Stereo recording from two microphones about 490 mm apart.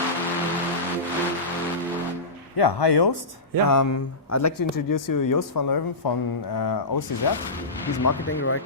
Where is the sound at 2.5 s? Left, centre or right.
Left.